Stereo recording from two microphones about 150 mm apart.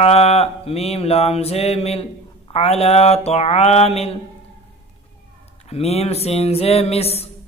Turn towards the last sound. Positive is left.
turn(degrees=45)  # may be behind; listen again after turning